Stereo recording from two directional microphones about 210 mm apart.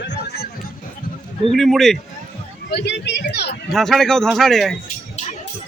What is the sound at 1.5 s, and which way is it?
Speech, centre (ahead or behind).